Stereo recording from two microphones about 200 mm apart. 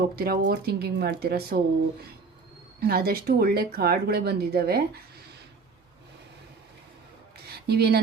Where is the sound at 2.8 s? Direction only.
50° right (ahead or behind).